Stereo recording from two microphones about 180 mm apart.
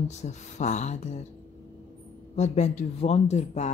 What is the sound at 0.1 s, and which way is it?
A man's voice, 40° left (ahead or behind).